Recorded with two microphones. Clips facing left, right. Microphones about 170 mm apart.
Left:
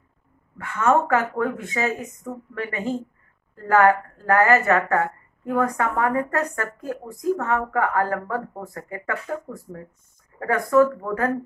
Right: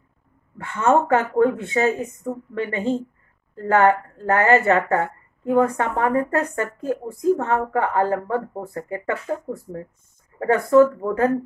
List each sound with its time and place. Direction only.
0.6 s a woman's voice: 30° right (ahead or behind)